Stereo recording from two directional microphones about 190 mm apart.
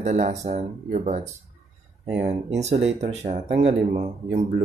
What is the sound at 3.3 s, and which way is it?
Speech, 30° right (ahead or behind).